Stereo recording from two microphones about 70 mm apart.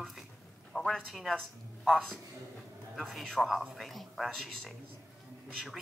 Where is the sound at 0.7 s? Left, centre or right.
Centre.